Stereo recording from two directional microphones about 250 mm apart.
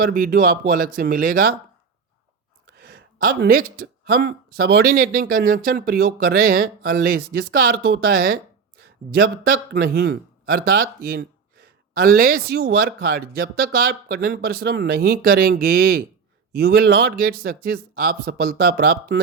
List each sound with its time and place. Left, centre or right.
0.1 s speech: right
2.8 s speech: right